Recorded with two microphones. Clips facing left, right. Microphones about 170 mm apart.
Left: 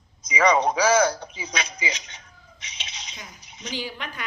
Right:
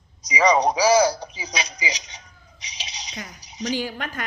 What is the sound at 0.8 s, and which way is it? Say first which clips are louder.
Speech: right 2 dB; 35° right (ahead or behind).